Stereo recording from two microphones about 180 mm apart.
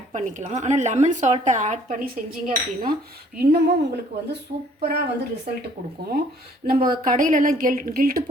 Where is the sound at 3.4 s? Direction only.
60° right (ahead or behind).